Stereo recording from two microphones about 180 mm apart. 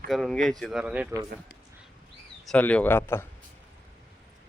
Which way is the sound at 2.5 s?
10° left (ahead or behind).